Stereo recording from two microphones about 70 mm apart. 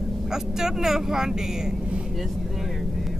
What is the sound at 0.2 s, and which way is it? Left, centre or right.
Speech, centre.